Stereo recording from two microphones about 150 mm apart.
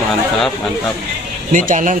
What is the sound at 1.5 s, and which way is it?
Speech, 60° right (ahead or behind).